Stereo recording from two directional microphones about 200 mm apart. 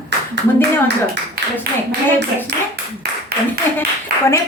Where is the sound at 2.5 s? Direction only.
50° right (ahead or behind).